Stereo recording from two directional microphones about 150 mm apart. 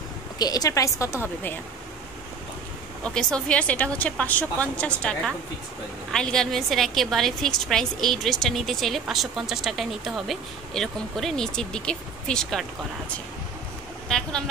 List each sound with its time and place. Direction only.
0.4 s a woman's voice: 25° left (ahead or behind)
3.2 s a woman's voice: 5° left (ahead or behind)
14.0 s speech: 5° left (ahead or behind)